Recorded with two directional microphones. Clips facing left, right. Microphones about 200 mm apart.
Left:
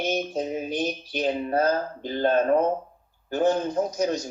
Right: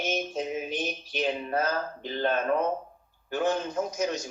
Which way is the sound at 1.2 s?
35° left (ahead or behind).